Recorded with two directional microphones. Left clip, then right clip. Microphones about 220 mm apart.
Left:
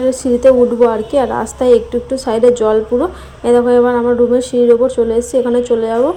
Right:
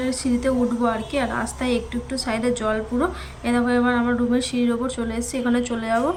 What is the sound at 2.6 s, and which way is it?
Speech, 20° right (ahead or behind).